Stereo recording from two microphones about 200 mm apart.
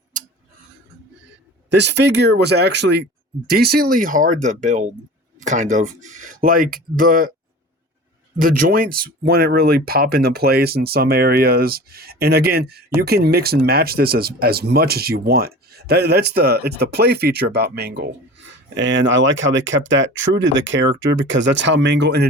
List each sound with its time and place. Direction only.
1.7 s speech: 60° right (ahead or behind); by 7.3 s 45° right (ahead or behind)
8.4 s speech: 45° right (ahead or behind)
18.7 s speech: 65° right (ahead or behind)